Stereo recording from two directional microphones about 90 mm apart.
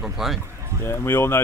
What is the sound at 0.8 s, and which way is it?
Speech, 25° left (ahead or behind).